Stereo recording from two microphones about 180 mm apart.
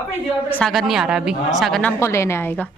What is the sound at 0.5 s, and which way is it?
A woman's voice, 5° left (ahead or behind).